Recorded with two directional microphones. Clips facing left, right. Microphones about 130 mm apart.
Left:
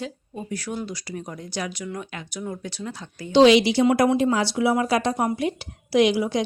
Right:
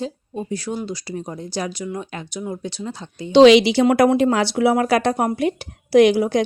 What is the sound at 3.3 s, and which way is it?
A woman's voice, 85° right.